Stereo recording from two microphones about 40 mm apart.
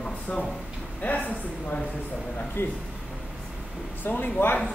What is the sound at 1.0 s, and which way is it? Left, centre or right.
Speech, left.